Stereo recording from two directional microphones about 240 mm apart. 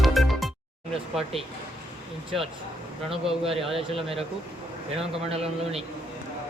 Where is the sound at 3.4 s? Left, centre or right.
Right.